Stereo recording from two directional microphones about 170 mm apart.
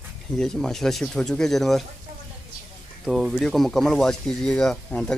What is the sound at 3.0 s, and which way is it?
Speech, centre (ahead or behind).